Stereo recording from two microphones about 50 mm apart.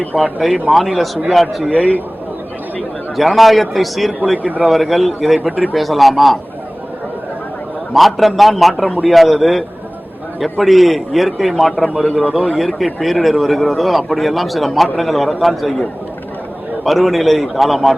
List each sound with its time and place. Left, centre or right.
0.2 s speech: centre
1.7 s a man's voice: left
3.2 s speech: centre
7.9 s speech: centre